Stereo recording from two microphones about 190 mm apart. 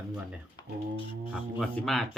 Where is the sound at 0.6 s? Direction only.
25° left (ahead or behind).